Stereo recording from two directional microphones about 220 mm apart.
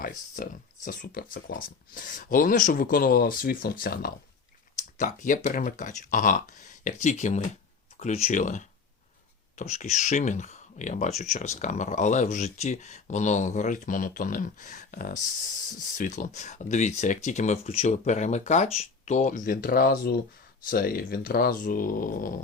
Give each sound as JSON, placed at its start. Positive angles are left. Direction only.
{"t": 0.4, "sound": "speech", "side_deg": 35}